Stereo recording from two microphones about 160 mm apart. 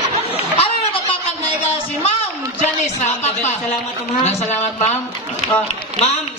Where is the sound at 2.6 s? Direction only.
45° left (ahead or behind).